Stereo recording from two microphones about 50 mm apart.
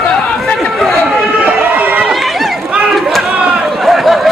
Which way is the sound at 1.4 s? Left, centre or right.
Right.